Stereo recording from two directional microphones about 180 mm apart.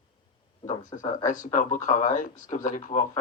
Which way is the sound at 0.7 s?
45° left (ahead or behind).